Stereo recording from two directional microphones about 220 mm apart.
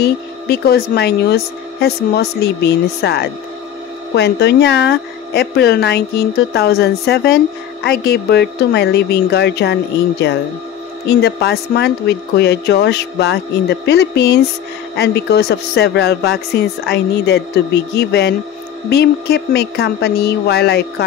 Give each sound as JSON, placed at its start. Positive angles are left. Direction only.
{"t": 0.0, "sound": "speech", "side_deg": 45}
{"t": 11.1, "sound": "speech", "side_deg": 50}